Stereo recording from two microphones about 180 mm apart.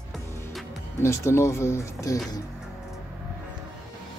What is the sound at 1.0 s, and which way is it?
Speech, 15° left (ahead or behind).